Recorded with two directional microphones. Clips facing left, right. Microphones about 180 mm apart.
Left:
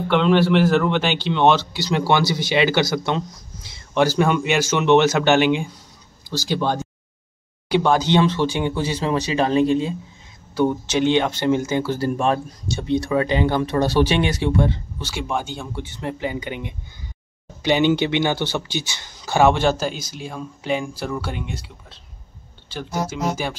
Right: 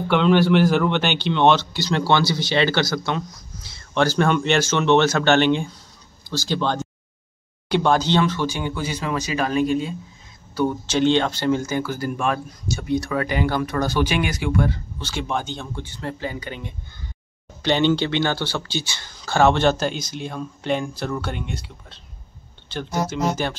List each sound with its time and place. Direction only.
0.1 s speech: centre (ahead or behind); by 15.0 s 25° left (ahead or behind)
15.0 s speech: 5° left (ahead or behind)